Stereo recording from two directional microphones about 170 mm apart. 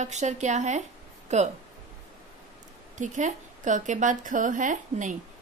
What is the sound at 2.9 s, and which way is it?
Speech, 45° right (ahead or behind).